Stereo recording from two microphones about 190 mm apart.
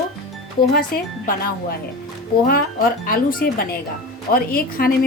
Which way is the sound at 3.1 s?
50° left (ahead or behind).